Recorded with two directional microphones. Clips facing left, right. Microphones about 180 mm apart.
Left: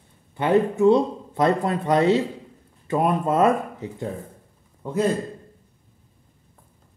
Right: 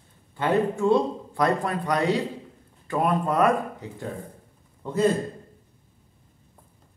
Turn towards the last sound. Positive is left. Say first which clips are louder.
# left 2 dB
turn(degrees=10)  # may be behind; listen again after turning